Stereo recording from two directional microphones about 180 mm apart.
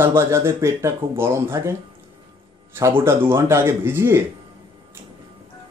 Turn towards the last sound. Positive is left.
turn(degrees=-15)  # may be behind; listen again after turning